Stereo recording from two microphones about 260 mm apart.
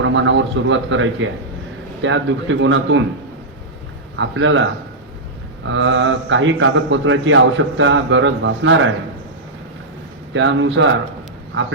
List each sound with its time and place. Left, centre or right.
0.0 s a man's voice: right
4.2 s a man's voice: right
10.3 s a man's voice: right